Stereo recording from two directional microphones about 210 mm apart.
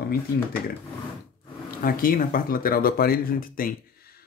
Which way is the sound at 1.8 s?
45° left (ahead or behind).